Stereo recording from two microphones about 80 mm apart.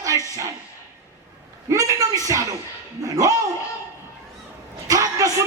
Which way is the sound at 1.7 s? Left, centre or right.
Right.